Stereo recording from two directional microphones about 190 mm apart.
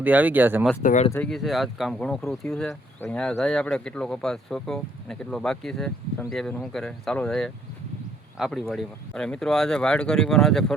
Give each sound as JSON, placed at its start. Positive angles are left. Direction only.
{"t": 0.0, "sound": "speech", "side_deg": -10}
{"t": 0.8, "sound": "speech", "side_deg": 40}
{"t": 1.1, "sound": "speech", "side_deg": 5}